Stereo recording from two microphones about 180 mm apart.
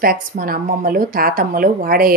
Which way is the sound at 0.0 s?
55° right (ahead or behind).